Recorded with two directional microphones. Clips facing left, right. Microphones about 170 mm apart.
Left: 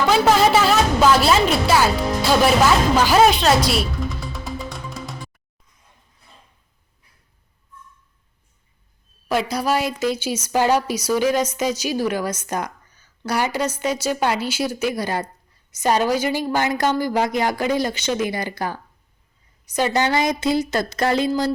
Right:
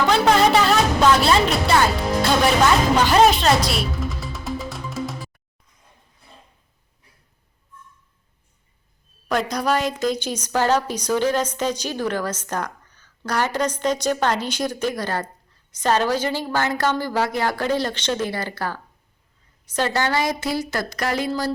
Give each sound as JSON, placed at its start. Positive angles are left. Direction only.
{"t": 0.1, "sound": "music", "side_deg": 5}
{"t": 3.1, "sound": "music", "side_deg": 0}
{"t": 9.3, "sound": "a woman's voice", "side_deg": 5}